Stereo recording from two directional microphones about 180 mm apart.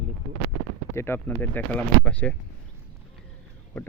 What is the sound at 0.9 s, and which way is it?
Speech, 15° left (ahead or behind).